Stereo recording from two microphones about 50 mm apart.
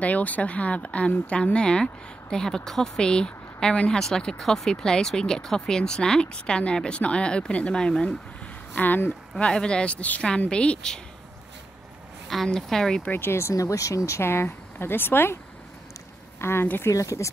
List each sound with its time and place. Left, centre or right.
0.0 s speech: left
8.7 s speech: left
9.4 s speech: centre
12.4 s speech: centre
13.1 s speech: left
14.2 s speech: left
16.3 s speech: left
16.8 s speech: left